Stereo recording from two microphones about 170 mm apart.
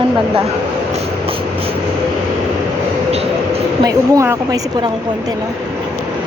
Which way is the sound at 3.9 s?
15° right (ahead or behind).